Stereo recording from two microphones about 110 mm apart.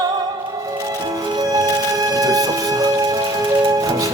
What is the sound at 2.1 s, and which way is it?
Music, 35° right (ahead or behind).